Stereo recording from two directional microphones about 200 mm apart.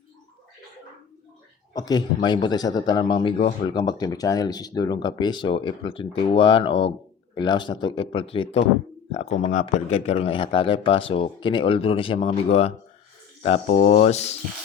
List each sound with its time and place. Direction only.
1.7 s speech: 20° left (ahead or behind)